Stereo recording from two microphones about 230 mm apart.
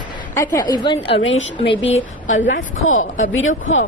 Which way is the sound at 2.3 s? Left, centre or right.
Left.